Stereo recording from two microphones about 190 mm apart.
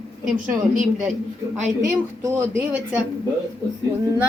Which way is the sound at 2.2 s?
10° right (ahead or behind).